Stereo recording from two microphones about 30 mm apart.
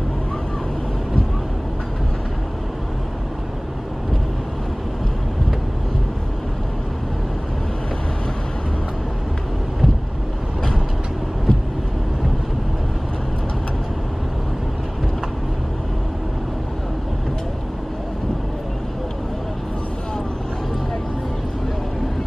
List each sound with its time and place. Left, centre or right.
11.5 s vehicle: left